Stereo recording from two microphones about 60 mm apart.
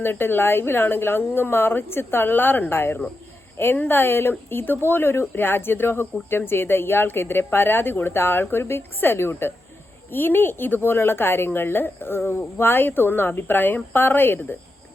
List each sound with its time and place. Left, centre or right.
0.0 s speech: left